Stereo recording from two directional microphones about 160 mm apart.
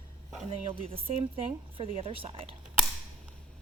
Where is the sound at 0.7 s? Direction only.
35° right (ahead or behind).